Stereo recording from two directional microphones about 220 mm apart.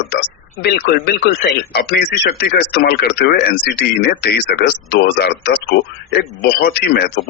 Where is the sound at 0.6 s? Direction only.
45° left (ahead or behind).